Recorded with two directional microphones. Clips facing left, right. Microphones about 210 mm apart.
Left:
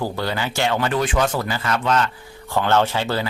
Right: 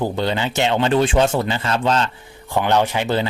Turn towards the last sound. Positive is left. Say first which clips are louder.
# right 2 dB
turn(degrees=-20)  # may be behind; listen again after turning